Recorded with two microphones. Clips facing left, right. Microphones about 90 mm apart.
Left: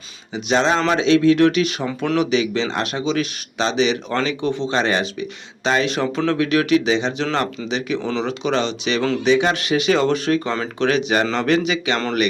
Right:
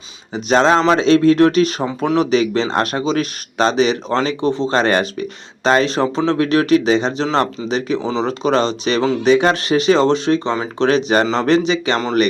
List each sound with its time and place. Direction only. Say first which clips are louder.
0.3 s speech: right 5 dB; 45° right (ahead or behind); by 10.7 s 20° right (ahead or behind)
10.8 s speech: right 4 dB; 35° right (ahead or behind)